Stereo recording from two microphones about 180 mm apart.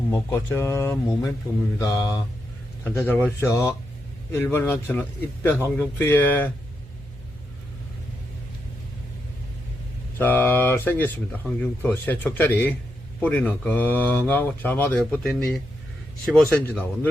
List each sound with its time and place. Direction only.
0.1 s speech: 15° left (ahead or behind)
1.8 s mantra: 20° left (ahead or behind)
2.8 s speech: 10° left (ahead or behind)
10.2 s speech: 10° left (ahead or behind)